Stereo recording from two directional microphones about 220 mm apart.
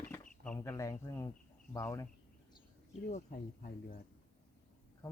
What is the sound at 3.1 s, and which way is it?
Speech, 40° left (ahead or behind).